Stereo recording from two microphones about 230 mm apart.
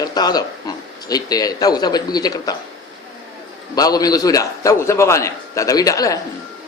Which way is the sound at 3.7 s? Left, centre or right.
Centre.